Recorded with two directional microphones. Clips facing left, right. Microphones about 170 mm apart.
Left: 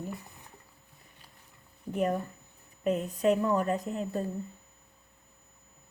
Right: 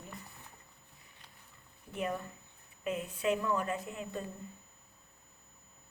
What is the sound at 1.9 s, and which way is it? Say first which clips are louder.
A woman's voice: left 7 dB; 40° left (ahead or behind).